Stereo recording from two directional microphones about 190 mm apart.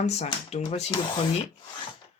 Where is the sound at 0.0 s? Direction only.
35° left (ahead or behind).